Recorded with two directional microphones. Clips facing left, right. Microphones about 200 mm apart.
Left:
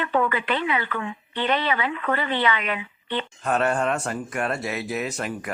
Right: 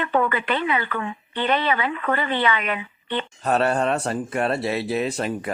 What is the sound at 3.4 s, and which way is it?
Speech, 35° right (ahead or behind).